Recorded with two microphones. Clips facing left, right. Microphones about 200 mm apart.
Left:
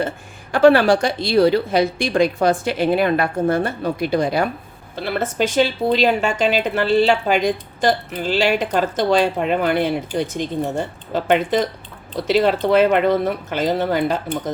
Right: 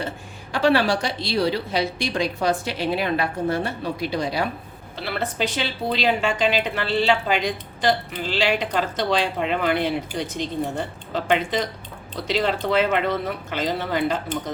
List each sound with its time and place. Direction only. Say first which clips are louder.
0.5 s a woman's voice: left 7 dB; 50° left (ahead or behind)